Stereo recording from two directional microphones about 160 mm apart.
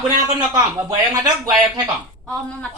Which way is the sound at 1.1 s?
25° right (ahead or behind).